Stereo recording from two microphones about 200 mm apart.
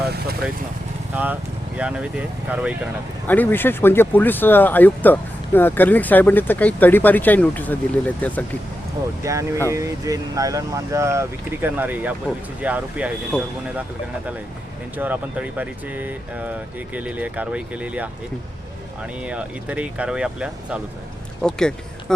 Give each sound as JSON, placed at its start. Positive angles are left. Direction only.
{"t": 1.1, "sound": "speech", "side_deg": -10}
{"t": 3.2, "sound": "speech", "side_deg": 10}
{"t": 9.2, "sound": "speech", "side_deg": -15}
{"t": 14.9, "sound": "speech", "side_deg": -10}
{"t": 19.2, "sound": "speech", "side_deg": -5}